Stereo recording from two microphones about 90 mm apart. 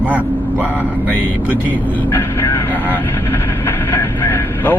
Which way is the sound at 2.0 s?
25° left (ahead or behind).